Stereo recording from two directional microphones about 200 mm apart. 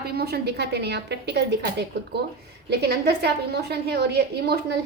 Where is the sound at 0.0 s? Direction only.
50° right (ahead or behind).